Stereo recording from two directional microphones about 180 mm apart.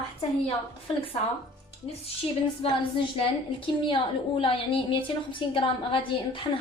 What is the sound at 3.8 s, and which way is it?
A woman's voice, 30° left (ahead or behind).